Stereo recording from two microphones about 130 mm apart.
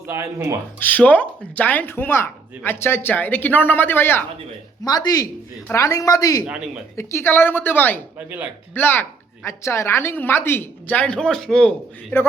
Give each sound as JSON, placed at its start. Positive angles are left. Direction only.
{"t": 0.1, "sound": "speech", "side_deg": -20}
{"t": 0.8, "sound": "speech", "side_deg": 15}
{"t": 4.8, "sound": "speech", "side_deg": 30}